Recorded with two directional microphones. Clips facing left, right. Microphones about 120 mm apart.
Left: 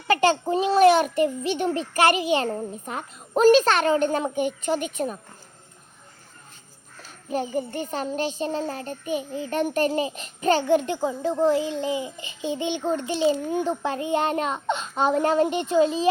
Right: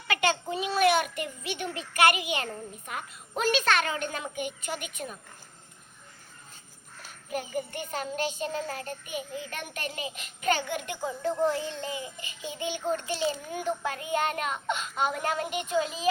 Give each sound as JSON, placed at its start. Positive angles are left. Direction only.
{"t": 0.1, "sound": "a child's voice", "side_deg": 35}
{"t": 7.3, "sound": "a child's voice", "side_deg": 30}